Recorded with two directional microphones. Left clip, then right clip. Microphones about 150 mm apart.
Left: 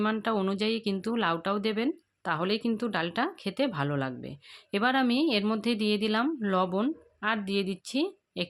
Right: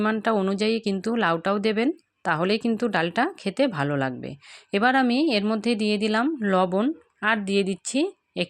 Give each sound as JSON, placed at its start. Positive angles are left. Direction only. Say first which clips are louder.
{"t": 0.0, "sound": "speech", "louder": "right 5 dB", "side_deg": -35}